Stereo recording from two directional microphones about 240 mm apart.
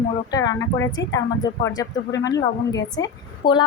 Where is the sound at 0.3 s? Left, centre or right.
Centre.